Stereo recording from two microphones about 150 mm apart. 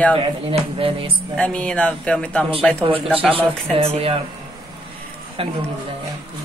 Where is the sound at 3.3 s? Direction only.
40° right (ahead or behind).